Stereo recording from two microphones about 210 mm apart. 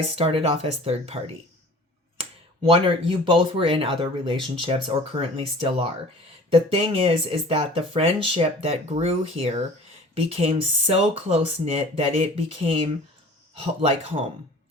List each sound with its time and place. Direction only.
0.2 s speech: 25° right (ahead or behind)
2.6 s speech: 25° right (ahead or behind)